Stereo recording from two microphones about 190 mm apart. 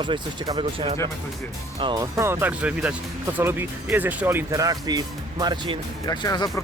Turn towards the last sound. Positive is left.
turn(degrees=20)  # may be behind; listen again after turning